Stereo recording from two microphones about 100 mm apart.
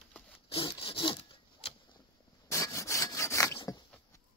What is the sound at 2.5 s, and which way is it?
Sawing, 30° left (ahead or behind).